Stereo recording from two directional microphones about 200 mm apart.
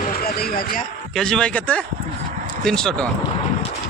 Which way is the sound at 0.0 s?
50° left (ahead or behind).